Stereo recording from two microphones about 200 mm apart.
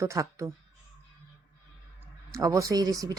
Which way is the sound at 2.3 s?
15° right (ahead or behind).